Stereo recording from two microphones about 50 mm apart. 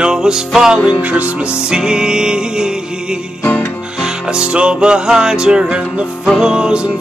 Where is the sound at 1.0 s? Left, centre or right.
Right.